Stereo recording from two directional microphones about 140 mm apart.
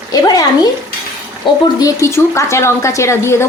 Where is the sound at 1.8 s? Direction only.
20° left (ahead or behind).